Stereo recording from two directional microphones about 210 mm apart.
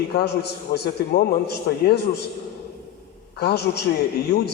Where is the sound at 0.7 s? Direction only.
45° left (ahead or behind).